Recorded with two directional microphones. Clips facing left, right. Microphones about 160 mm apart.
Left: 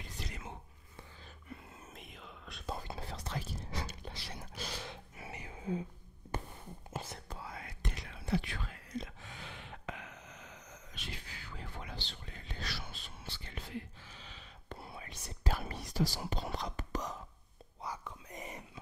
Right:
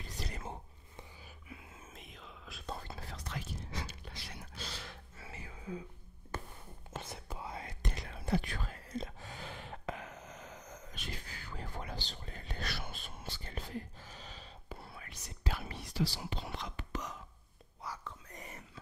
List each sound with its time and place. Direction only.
0.2 s whispering: 40° right (ahead or behind)
1.5 s whispering: 5° right (ahead or behind)
2.9 s whispering: 25° left (ahead or behind)
4.0 s a sound: 30° left (ahead or behind)
4.8 s a sound: 20° left (ahead or behind)
7.3 s whispering: 25° right (ahead or behind)
7.9 s whispering: 45° right (ahead or behind)
14.9 s whispering: 25° left (ahead or behind)
15.4 s whispering: 45° left (ahead or behind)
17.8 s whispering: 15° left (ahead or behind)